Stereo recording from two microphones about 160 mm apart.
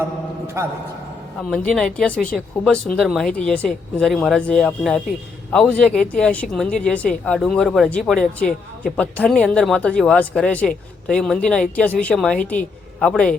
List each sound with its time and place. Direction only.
0.6 s a man's voice: 15° right (ahead or behind)
1.4 s a woman's voice: 5° left (ahead or behind)